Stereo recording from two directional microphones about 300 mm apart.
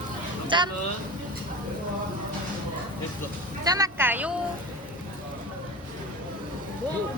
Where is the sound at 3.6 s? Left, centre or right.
Centre.